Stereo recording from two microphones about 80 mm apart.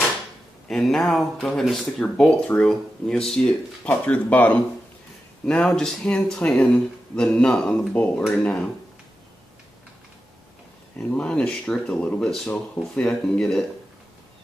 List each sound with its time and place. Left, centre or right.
0.7 s speech: centre
3.9 s speech: centre
11.0 s speech: centre